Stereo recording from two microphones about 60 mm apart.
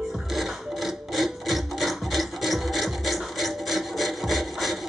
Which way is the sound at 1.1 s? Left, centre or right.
Centre.